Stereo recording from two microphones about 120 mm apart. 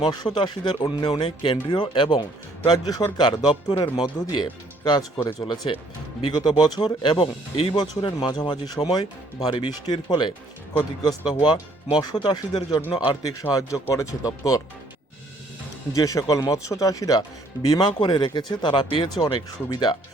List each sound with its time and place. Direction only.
0.0 s speech: 35° left (ahead or behind)
4.8 s speech: 30° left (ahead or behind)
5.2 s speech: 40° left (ahead or behind)
13.2 s speech: 30° left (ahead or behind)
15.9 s speech: 30° left (ahead or behind)